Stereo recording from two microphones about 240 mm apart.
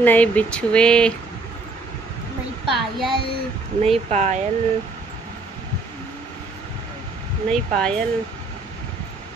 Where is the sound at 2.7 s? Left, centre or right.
Centre.